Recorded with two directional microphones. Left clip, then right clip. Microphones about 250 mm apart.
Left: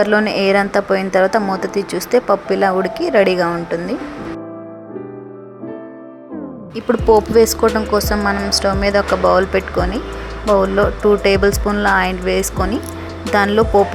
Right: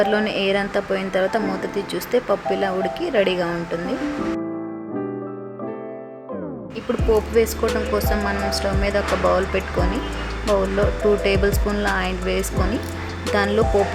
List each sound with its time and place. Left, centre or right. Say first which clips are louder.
0.0 s a woman's voice: left 5 dB; centre
6.7 s speech: left 8 dB; left
7.7 s a woman's voice: left 5 dB; centre